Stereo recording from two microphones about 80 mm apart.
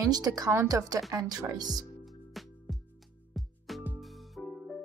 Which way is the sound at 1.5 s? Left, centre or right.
Right.